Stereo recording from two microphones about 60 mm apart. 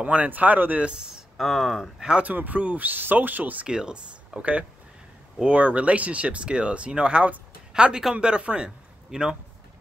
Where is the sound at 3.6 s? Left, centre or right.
Centre.